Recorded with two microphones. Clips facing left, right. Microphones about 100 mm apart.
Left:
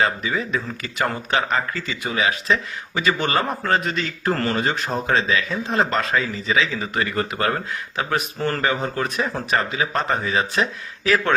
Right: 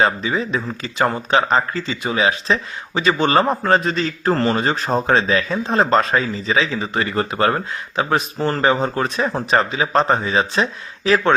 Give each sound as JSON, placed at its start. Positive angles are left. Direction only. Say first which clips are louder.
{"t": 0.0, "sound": "speech", "louder": "right 3 dB", "side_deg": -30}